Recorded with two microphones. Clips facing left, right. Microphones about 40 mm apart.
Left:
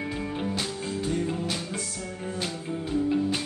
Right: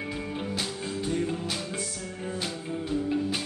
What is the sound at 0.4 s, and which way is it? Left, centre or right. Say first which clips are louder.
Music: left 2 dB; centre.